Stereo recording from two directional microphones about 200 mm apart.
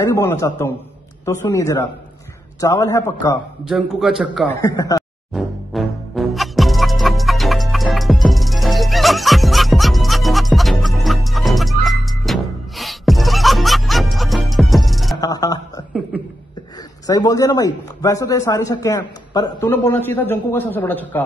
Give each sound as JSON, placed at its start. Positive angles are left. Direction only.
{"t": 0.0, "sound": "a man's voice", "side_deg": 15}
{"t": 3.6, "sound": "a man's voice", "side_deg": 0}
{"t": 4.5, "sound": "a man's voice", "side_deg": 15}
{"t": 5.3, "sound": "music", "side_deg": 0}
{"t": 15.1, "sound": "music", "side_deg": 20}
{"t": 16.1, "sound": "a sound", "side_deg": -5}
{"t": 17.0, "sound": "a man's voice", "side_deg": 20}